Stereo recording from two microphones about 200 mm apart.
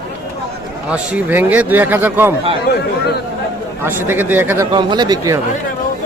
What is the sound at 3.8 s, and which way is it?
Speech, 10° right (ahead or behind).